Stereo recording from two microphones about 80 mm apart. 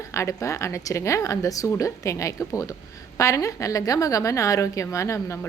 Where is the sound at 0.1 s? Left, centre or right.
Left.